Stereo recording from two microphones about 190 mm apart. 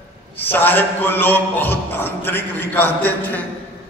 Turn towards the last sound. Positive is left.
turn(degrees=10)  # may be behind; listen again after turning